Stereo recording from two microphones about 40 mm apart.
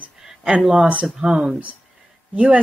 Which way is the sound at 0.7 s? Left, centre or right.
Right.